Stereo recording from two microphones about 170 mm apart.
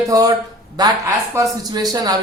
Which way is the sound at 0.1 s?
20° right (ahead or behind).